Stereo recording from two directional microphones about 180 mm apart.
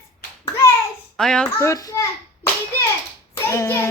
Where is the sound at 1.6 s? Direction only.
20° left (ahead or behind).